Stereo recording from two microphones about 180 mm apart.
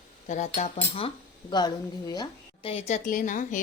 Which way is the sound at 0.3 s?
45° left (ahead or behind).